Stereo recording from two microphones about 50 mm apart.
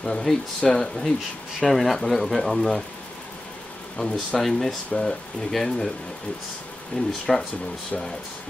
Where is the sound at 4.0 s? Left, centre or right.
Centre.